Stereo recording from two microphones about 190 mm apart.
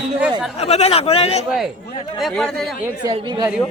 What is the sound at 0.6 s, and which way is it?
Speech, 35° left (ahead or behind).